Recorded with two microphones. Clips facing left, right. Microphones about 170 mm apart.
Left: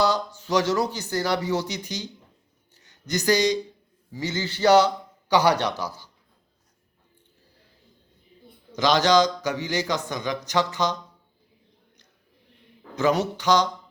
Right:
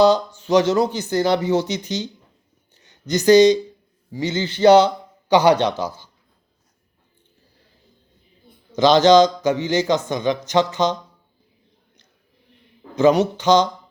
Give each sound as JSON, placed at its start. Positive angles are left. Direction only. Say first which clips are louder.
{"t": 0.0, "sound": "a man's voice", "louder": "right 8 dB", "side_deg": -20}
{"t": 8.7, "sound": "a man's voice", "louder": "right 7 dB", "side_deg": -25}
{"t": 13.0, "sound": "a man's voice", "louder": "right 7 dB", "side_deg": -20}